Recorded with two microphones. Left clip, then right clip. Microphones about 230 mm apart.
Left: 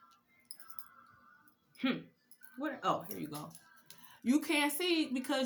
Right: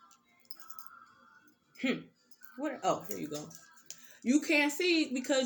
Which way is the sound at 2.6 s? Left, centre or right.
Centre.